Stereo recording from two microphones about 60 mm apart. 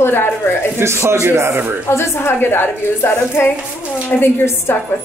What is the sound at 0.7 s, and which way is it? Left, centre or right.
Speech, right.